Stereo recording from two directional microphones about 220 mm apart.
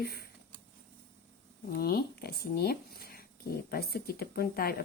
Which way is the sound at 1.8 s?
45° left (ahead or behind).